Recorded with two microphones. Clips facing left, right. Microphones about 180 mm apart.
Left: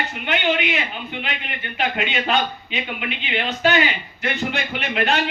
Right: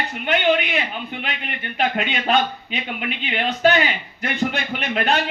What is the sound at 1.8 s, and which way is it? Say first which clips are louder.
A man's voice: right 1 dB; 45° right (ahead or behind).